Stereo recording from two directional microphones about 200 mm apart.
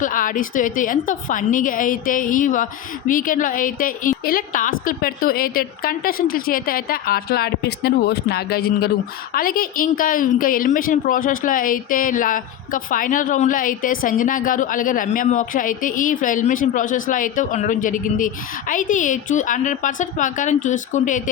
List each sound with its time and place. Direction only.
0.0 s a woman's voice: 40° left (ahead or behind)